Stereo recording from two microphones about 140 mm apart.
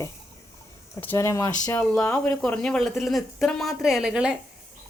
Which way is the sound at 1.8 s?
10° left (ahead or behind).